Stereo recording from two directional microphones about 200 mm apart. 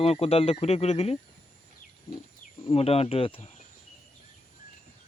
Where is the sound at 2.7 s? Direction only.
30° left (ahead or behind).